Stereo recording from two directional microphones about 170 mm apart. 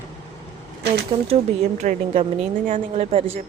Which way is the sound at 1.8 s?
40° right (ahead or behind).